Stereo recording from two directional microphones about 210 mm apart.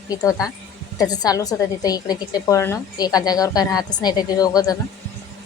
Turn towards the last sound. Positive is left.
turn(degrees=15)  # may be behind; listen again after turning